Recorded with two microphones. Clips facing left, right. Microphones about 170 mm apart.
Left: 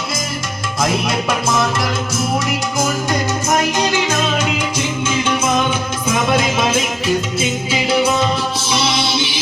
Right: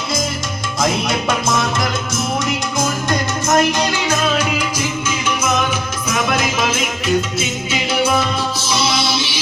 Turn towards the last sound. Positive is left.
turn(degrees=30)  # may be behind; listen again after turning